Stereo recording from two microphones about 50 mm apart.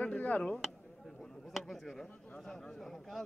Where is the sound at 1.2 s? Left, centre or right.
Centre.